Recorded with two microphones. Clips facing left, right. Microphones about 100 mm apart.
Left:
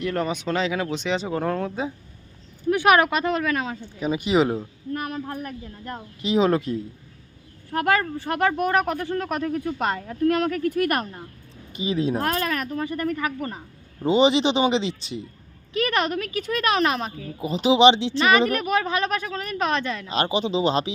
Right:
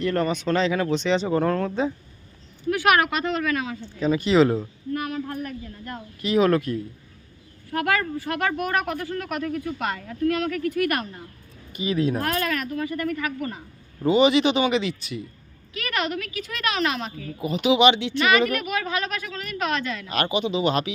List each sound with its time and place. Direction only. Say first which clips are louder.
0.0 s speech: right 2 dB; 5° left (ahead or behind)
2.6 s speech: left 2 dB; 25° left (ahead or behind)
4.0 s speech: right 2 dB; 15° left (ahead or behind)
5.1 s speech: right 1 dB; 30° left (ahead or behind)
6.2 s speech: right 1 dB; 25° left (ahead or behind); by 11.0 s 40° left (ahead or behind)
11.7 s speech: even; 25° left (ahead or behind)